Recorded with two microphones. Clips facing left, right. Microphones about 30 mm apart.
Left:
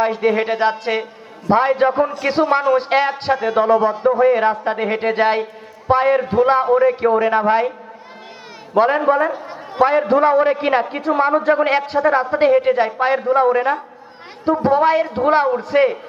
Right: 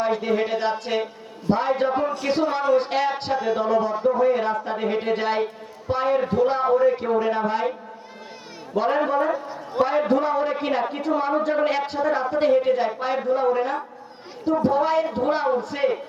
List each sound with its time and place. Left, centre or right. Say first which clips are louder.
0.2 s a man's voice: left 6 dB; left
2.2 s a man's voice: left 7 dB; centre
8.7 s a man's voice: left 7 dB; left